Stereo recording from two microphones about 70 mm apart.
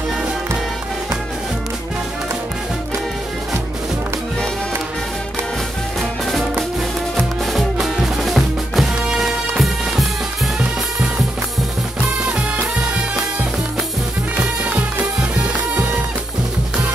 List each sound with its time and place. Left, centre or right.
5.9 s music: centre
7.8 s music: centre
14.4 s music: centre